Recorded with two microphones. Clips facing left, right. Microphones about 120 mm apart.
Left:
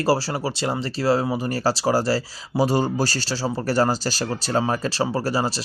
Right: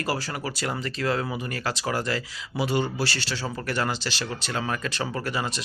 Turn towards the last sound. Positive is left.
turn(degrees=35)  # may be behind; listen again after turning